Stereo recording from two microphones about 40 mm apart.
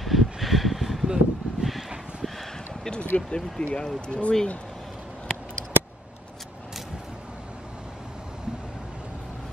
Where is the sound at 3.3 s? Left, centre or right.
Left.